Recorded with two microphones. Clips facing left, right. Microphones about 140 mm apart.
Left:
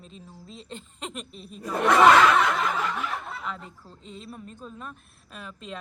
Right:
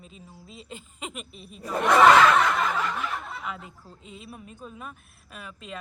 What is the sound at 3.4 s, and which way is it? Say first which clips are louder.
Speech: even; 5° right (ahead or behind).